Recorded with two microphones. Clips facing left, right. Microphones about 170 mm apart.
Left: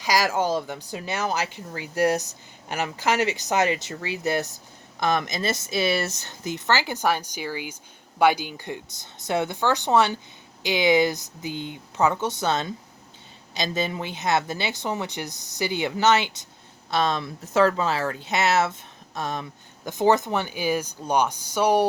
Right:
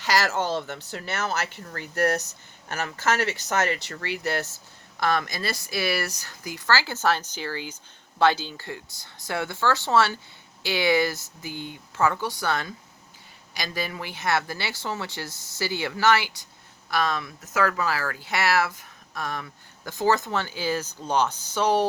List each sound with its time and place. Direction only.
0.0 s speech: 10° left (ahead or behind)